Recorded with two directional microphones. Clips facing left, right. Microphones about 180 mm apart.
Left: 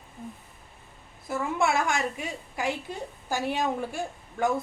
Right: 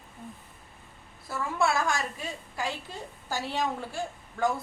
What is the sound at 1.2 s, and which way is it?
A woman's voice, 20° left (ahead or behind).